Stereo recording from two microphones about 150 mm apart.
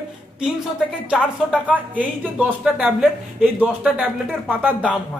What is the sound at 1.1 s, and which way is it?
Speech, 10° right (ahead or behind).